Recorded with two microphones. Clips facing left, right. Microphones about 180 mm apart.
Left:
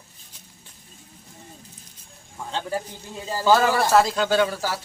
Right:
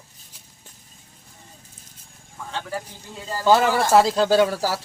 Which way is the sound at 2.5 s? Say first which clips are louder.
Left 2 dB; 15° left (ahead or behind).